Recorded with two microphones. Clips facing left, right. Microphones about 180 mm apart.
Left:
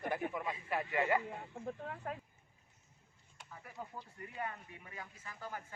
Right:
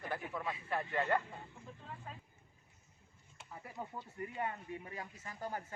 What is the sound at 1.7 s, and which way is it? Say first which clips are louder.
Chicken: left 10 dB; 60° left (ahead or behind).